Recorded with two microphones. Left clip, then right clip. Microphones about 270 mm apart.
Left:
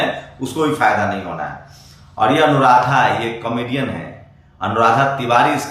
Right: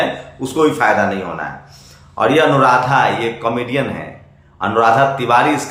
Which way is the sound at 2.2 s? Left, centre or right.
Centre.